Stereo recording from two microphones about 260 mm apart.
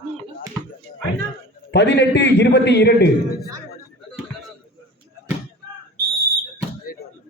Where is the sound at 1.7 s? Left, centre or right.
Left.